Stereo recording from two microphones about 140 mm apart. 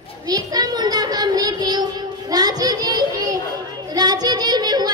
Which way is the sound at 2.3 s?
30° right (ahead or behind).